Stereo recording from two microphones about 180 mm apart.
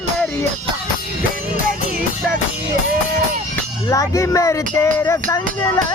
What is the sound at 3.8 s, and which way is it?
Music, 15° left (ahead or behind).